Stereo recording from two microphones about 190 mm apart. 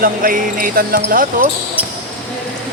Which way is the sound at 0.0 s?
45° right (ahead or behind).